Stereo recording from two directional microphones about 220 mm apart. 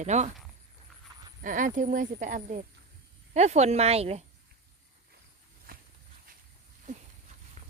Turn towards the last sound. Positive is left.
turn(degrees=-40)  # may be behind; listen again after turning